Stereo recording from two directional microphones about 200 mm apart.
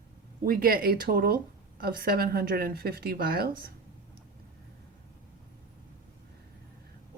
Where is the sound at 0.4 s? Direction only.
45° right (ahead or behind).